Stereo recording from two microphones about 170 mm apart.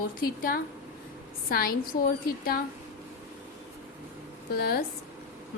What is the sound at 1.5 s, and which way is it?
Speech, 60° left (ahead or behind).